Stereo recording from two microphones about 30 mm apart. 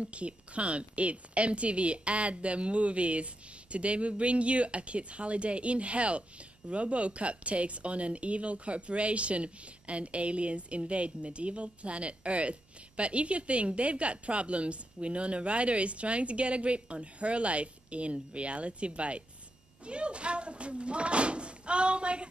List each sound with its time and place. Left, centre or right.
0.0 s a woman's voice: right